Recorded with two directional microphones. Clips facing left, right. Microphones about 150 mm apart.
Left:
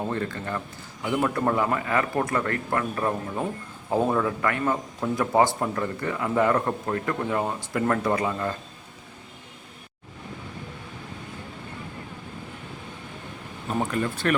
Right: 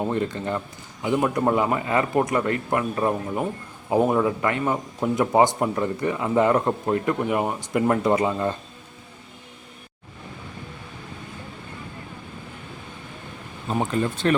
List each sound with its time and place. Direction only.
0.0 s a man's voice: 20° right (ahead or behind)
13.7 s a man's voice: 25° right (ahead or behind)